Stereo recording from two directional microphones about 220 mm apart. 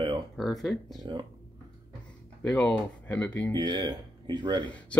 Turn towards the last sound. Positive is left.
turn(degrees=5)  # may be behind; listen again after turning